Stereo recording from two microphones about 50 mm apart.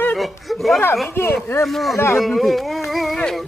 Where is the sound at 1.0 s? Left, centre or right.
Left.